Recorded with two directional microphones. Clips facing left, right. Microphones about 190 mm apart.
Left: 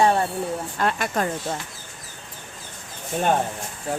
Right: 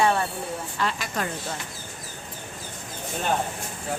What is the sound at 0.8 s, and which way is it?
Speech, 55° left (ahead or behind).